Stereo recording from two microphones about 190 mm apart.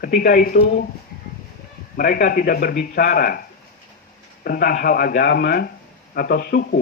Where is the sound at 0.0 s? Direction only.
50° left (ahead or behind).